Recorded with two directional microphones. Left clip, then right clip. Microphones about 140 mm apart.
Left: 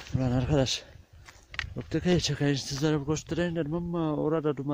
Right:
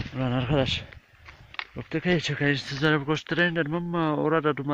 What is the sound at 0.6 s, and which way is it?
Speech, 45° left (ahead or behind).